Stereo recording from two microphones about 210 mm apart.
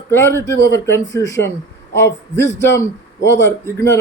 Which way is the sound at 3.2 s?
60° left (ahead or behind).